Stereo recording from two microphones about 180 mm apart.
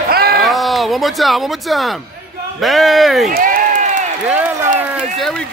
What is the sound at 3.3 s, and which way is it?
Crowd, 50° right (ahead or behind).